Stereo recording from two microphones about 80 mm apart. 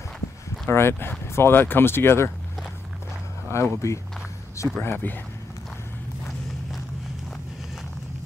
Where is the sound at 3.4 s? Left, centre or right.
Left.